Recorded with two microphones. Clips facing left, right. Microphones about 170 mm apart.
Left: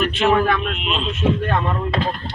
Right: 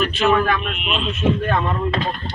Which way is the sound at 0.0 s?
20° left (ahead or behind).